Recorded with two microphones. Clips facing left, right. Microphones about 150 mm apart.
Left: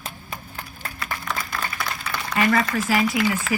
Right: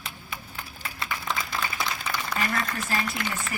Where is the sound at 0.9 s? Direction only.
25° right (ahead or behind).